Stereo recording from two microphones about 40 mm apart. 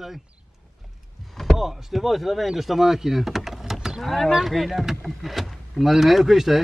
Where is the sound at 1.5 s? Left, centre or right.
Centre.